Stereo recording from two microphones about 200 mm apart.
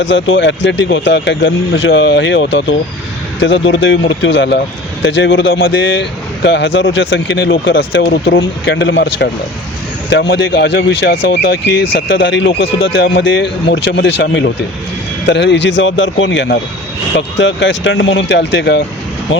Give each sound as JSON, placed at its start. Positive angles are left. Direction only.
{"t": 0.0, "sound": "speech", "side_deg": 65}
{"t": 12.1, "sound": "speech", "side_deg": 65}
{"t": 13.0, "sound": "speech", "side_deg": 65}